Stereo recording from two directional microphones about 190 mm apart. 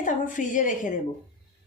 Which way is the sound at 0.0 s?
45° left (ahead or behind).